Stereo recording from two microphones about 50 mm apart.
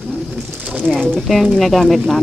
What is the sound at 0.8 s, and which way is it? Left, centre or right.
Speech, centre.